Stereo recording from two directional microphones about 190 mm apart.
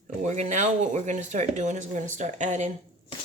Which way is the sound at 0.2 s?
40° right (ahead or behind).